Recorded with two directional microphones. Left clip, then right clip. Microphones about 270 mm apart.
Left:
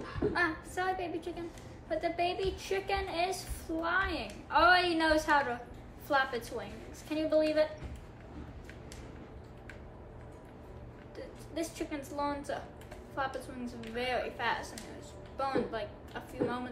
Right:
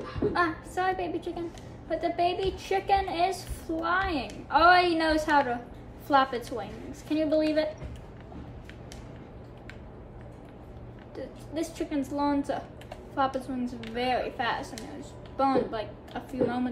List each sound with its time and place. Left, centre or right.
0.3 s a woman's voice: right
11.1 s a sound: right
12.2 s a woman's voice: right
13.9 s a woman's voice: right